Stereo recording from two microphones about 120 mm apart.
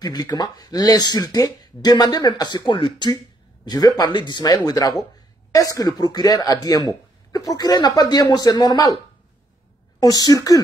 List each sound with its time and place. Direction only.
0.0 s speech: 35° left (ahead or behind)